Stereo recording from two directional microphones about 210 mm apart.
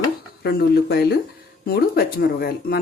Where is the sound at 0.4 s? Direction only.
50° left (ahead or behind).